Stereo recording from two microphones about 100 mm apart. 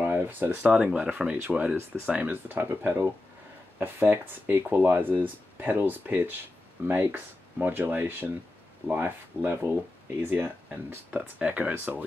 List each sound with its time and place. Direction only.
0.0 s speech: 20° right (ahead or behind)